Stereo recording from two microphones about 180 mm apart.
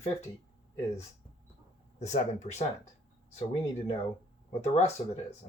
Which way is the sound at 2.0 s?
40° left (ahead or behind).